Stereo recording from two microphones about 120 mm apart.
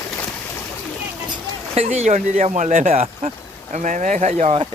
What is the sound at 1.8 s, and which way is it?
Speech, 70° right (ahead or behind).